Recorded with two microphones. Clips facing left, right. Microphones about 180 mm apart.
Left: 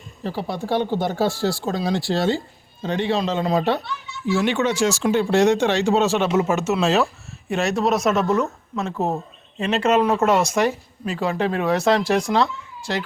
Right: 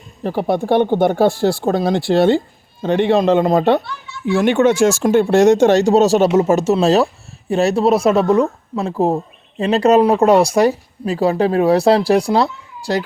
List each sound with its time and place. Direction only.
0.2 s speech: 55° right (ahead or behind); by 13.1 s 35° right (ahead or behind)